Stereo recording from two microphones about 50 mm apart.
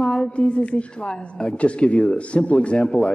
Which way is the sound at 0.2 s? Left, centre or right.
Centre.